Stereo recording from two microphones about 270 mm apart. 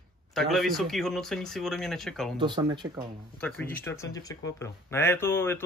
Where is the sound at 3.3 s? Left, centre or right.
Centre.